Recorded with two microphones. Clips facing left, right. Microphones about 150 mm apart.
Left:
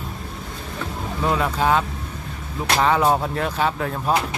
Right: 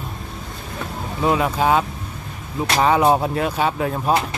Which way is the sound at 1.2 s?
15° right (ahead or behind).